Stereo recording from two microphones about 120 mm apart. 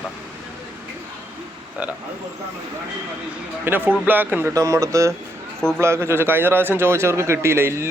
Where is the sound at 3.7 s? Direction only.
15° right (ahead or behind).